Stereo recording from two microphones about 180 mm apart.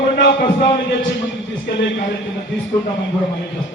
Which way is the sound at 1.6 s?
75° left (ahead or behind).